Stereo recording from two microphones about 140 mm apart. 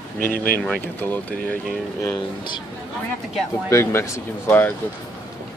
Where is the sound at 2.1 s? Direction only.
30° left (ahead or behind).